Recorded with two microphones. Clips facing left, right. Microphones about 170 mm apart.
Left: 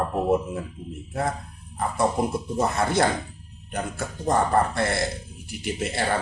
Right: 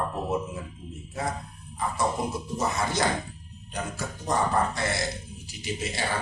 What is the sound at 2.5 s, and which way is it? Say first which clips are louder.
Speech: left 5 dB; 55° left (ahead or behind).